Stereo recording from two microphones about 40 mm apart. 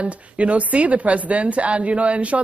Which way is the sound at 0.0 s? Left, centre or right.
Right.